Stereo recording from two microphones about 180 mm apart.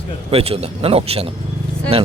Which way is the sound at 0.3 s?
35° right (ahead or behind).